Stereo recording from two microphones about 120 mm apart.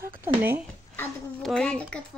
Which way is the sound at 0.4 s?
15° right (ahead or behind).